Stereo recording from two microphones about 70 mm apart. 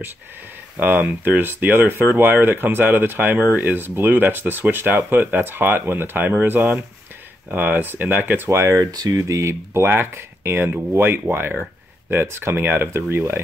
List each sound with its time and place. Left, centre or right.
0.7 s speech: right
8.5 s speech: right
8.7 s speech: right
9.3 s speech: right